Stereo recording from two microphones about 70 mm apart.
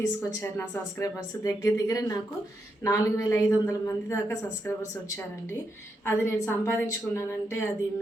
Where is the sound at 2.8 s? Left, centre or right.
Left.